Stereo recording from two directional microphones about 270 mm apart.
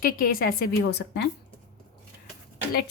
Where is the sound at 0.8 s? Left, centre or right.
Left.